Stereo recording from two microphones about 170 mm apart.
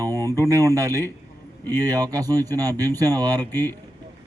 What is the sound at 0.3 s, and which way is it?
Speech, 20° right (ahead or behind).